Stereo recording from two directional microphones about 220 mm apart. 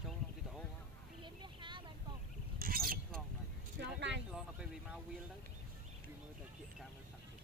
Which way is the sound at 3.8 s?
50° right (ahead or behind).